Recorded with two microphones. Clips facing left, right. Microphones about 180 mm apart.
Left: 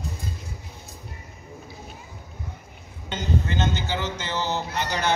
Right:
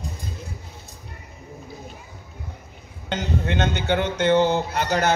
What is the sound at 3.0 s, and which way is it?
A man's voice, 65° right (ahead or behind).